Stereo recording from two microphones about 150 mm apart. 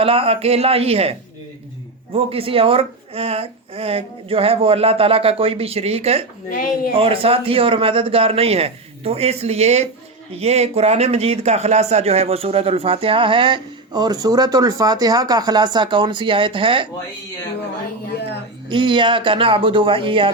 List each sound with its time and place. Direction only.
0.0 s speech: 40° right (ahead or behind)
2.1 s speech: 40° right (ahead or behind)
6.5 s speech: 70° left (ahead or behind)
6.9 s speech: 40° right (ahead or behind)
18.7 s speech: 35° right (ahead or behind)